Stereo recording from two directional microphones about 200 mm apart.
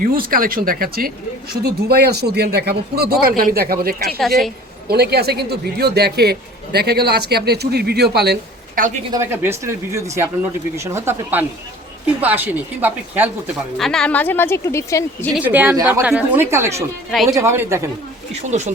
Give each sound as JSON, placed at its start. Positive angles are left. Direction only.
{"t": 0.0, "sound": "speech", "side_deg": -45}
{"t": 9.1, "sound": "speech", "side_deg": -10}
{"t": 13.7, "sound": "speech", "side_deg": 0}
{"t": 15.4, "sound": "speech", "side_deg": -10}
{"t": 18.3, "sound": "speech", "side_deg": -35}